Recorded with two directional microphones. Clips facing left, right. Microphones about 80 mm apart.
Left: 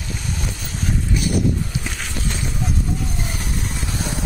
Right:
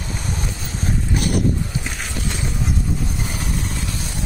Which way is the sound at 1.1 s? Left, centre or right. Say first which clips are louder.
Right 1 dB; right.